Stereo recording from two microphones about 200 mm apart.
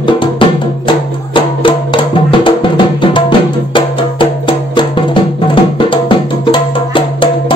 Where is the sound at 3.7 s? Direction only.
25° left (ahead or behind).